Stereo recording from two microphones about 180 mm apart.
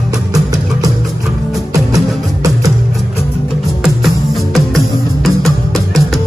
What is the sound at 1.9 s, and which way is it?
Music, 20° right (ahead or behind).